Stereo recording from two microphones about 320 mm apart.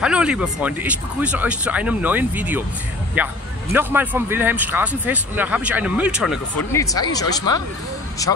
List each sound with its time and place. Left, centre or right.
0.0 s speech: centre
6.7 s speech: centre